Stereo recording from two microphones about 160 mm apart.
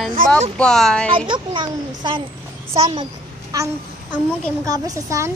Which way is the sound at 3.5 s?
20° right (ahead or behind).